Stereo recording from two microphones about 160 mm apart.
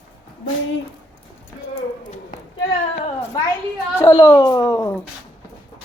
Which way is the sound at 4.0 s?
25° left (ahead or behind).